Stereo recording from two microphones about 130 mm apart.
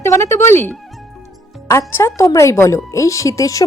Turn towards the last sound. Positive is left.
turn(degrees=25)  # may be behind; listen again after turning